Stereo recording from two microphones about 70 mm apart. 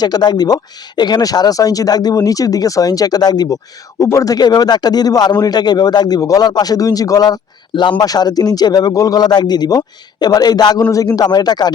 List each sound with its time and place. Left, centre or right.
0.0 s speech: left
4.0 s speech: left
4.4 s speech: left
7.8 s speech: left
10.9 s speech: left